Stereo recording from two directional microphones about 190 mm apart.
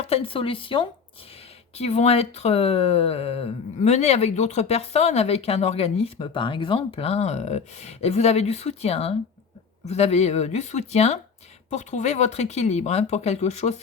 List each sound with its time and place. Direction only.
0.0 s speech: 30° left (ahead or behind)